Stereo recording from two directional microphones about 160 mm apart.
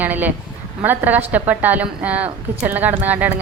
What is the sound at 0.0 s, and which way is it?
A woman's voice, 10° right (ahead or behind).